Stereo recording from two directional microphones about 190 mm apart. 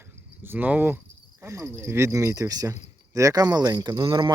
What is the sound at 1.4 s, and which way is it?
Speech, 15° right (ahead or behind).